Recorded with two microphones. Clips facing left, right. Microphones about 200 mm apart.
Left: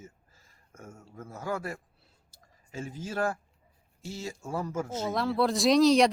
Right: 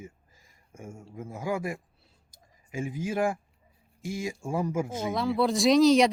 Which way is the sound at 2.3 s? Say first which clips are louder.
Right 5 dB; 15° right (ahead or behind).